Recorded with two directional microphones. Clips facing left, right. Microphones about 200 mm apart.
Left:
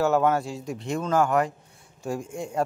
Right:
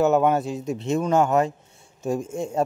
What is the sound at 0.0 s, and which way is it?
Speech, 20° right (ahead or behind).